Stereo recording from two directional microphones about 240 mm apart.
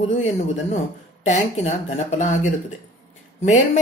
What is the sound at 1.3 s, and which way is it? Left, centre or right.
Speech, left.